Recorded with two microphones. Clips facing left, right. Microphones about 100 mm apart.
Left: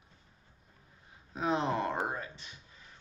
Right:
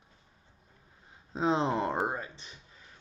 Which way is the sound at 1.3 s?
25° right (ahead or behind).